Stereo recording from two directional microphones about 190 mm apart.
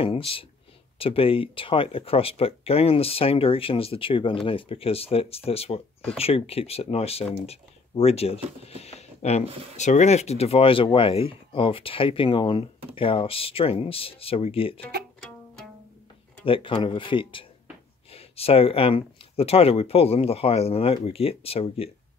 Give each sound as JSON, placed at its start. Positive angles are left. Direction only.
{"t": 0.0, "sound": "speech", "side_deg": 30}
{"t": 16.4, "sound": "speech", "side_deg": 25}